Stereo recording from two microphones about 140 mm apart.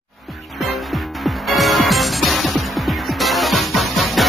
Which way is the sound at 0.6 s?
Centre (ahead or behind).